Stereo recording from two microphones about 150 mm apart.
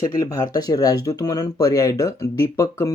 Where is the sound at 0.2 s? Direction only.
20° left (ahead or behind).